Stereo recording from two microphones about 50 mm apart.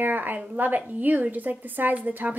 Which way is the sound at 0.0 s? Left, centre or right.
Right.